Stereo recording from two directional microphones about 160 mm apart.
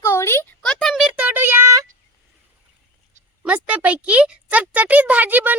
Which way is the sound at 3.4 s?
10° right (ahead or behind).